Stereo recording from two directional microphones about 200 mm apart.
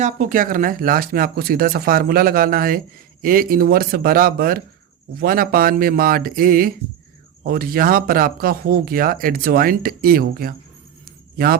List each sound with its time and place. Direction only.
0.0 s speech: 40° right (ahead or behind)